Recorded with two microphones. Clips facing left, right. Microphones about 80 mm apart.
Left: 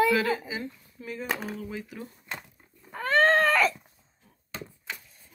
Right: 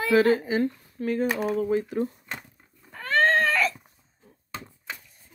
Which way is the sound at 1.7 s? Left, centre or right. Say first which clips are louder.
Right 13 dB; right.